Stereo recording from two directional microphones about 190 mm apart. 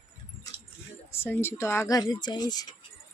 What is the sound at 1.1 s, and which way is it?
Speech, 10° left (ahead or behind).